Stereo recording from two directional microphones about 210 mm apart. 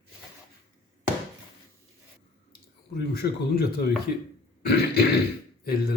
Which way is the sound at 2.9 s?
50° left (ahead or behind).